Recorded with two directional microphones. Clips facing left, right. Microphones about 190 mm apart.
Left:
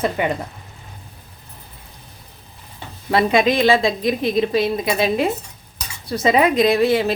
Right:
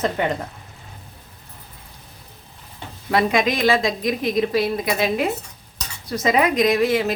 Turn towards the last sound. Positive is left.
turn(degrees=30)  # may be behind; listen again after turning